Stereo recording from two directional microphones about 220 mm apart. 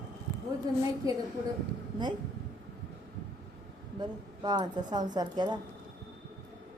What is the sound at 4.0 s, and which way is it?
Speech, 20° right (ahead or behind).